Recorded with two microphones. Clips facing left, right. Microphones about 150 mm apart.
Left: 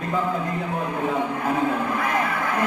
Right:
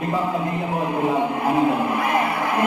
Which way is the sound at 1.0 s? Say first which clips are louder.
Right 4 dB; 20° right (ahead or behind).